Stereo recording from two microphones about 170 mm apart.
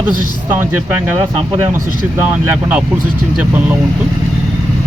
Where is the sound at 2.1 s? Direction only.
10° right (ahead or behind).